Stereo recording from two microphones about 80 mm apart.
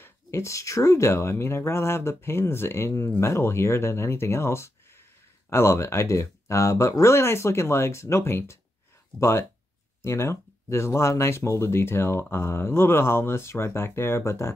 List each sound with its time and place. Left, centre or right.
0.0 s speech: left